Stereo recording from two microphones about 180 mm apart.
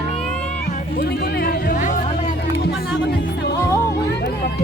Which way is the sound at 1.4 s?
50° left (ahead or behind).